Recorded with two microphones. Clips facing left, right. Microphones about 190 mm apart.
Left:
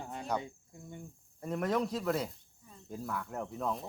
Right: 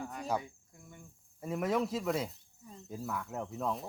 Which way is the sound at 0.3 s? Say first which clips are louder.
Even; 25° left (ahead or behind).